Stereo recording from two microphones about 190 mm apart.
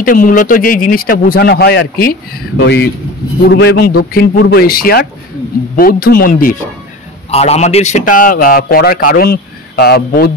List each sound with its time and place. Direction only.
0.0 s a man's voice: 45° left (ahead or behind)
7.2 s a man's voice: 35° left (ahead or behind); by 10.3 s 55° left (ahead or behind)